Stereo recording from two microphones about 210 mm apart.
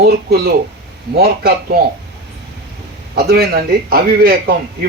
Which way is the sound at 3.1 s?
50° right (ahead or behind).